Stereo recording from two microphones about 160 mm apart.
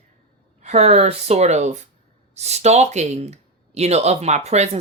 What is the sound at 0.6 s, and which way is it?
Speech, 45° right (ahead or behind).